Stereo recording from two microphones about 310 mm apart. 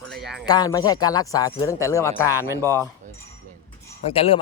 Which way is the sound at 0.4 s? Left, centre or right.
Centre.